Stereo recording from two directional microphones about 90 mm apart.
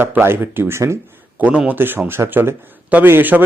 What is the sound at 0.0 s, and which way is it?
Speech, 25° right (ahead or behind).